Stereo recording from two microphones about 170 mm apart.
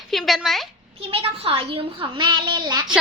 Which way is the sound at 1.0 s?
35° right (ahead or behind).